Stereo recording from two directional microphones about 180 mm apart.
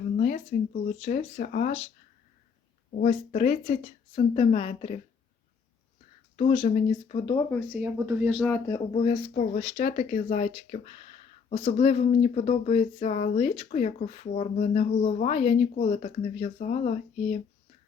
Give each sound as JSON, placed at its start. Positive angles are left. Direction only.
{"t": 0.2, "sound": "speech", "side_deg": 40}
{"t": 2.9, "sound": "speech", "side_deg": 45}
{"t": 6.3, "sound": "speech", "side_deg": 30}
{"t": 7.7, "sound": "speech", "side_deg": -10}
{"t": 8.4, "sound": "speech", "side_deg": 5}
{"t": 8.9, "sound": "speech", "side_deg": 30}
{"t": 10.0, "sound": "speech", "side_deg": 45}
{"t": 13.7, "sound": "speech", "side_deg": 40}